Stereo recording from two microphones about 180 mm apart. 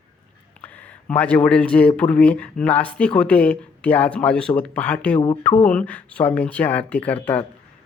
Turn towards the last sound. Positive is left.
turn(degrees=10)  # may be behind; listen again after turning